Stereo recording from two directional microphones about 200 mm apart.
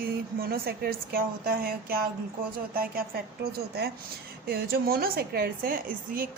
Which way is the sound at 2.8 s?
50° right (ahead or behind).